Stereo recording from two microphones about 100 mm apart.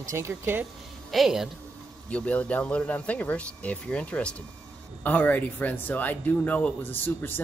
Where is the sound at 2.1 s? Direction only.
15° left (ahead or behind).